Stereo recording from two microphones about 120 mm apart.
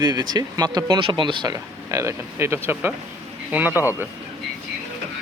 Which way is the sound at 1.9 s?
25° right (ahead or behind).